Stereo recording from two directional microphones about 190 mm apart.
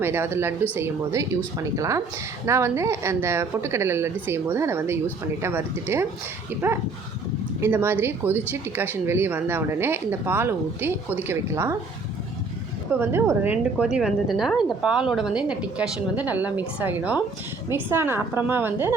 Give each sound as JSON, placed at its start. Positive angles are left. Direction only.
{"t": 0.0, "sound": "speech", "side_deg": -10}
{"t": 12.9, "sound": "a woman's voice", "side_deg": -10}